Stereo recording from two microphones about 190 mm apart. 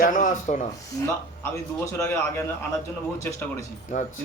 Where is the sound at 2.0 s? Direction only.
15° left (ahead or behind).